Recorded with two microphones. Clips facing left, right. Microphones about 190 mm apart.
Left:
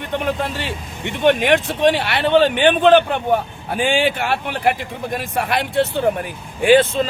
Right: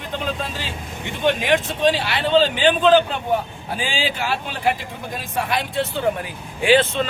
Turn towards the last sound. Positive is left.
turn(degrees=50)  # may be behind; listen again after turning